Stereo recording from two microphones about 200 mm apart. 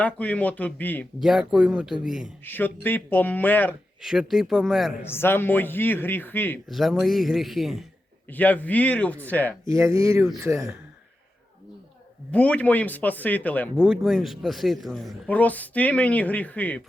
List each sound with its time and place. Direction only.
0.0 s speech: 5° left (ahead or behind)
1.2 s speech: centre (ahead or behind)
2.4 s speech: 10° left (ahead or behind)
4.0 s speech: centre (ahead or behind)
5.0 s speech: 10° left (ahead or behind)
6.7 s speech: centre (ahead or behind)
9.6 s speech: 15° right (ahead or behind)
12.3 s speech: 5° left (ahead or behind)
13.7 s speech: 5° right (ahead or behind)